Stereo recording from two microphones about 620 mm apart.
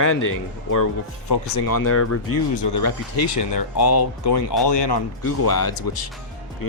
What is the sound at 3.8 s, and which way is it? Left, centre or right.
Speech, left.